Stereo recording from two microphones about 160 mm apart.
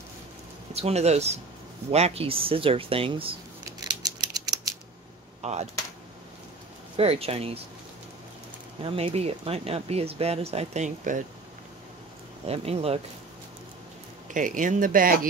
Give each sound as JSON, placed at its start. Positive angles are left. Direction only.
{"t": 0.7, "sound": "speech", "side_deg": -40}
{"t": 3.8, "sound": "scissors", "side_deg": -25}
{"t": 5.4, "sound": "speech", "side_deg": -45}
{"t": 7.0, "sound": "speech", "side_deg": -40}
{"t": 8.8, "sound": "speech", "side_deg": -35}
{"t": 12.4, "sound": "speech", "side_deg": -40}
{"t": 14.3, "sound": "speech", "side_deg": -55}